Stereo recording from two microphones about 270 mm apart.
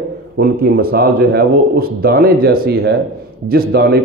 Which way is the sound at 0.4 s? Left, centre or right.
Right.